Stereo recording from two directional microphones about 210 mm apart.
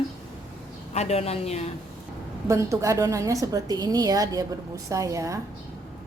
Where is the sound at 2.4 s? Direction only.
15° right (ahead or behind).